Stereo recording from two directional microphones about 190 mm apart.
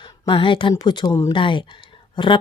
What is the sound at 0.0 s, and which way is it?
Speech, 25° left (ahead or behind).